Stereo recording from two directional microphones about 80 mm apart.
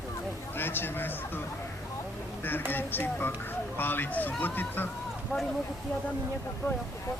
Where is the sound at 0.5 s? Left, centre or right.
Left.